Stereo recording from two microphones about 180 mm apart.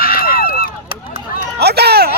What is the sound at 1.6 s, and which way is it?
Speech, 65° right (ahead or behind).